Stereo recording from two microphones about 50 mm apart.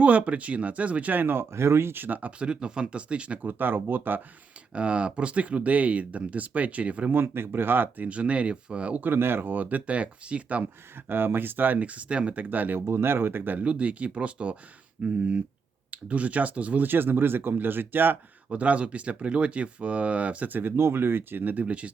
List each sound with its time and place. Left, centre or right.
0.0 s speech: right
1.2 s speech: right
2.5 s speech: centre
3.4 s speech: right
4.7 s speech: right
7.1 s speech: right
8.0 s speech: right
9.0 s speech: right
11.1 s speech: right
12.9 s speech: right
13.6 s speech: right
18.5 s speech: right
20.7 s speech: right